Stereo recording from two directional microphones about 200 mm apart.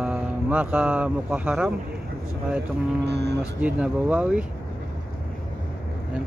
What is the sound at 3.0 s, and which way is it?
Speech, 55° right (ahead or behind).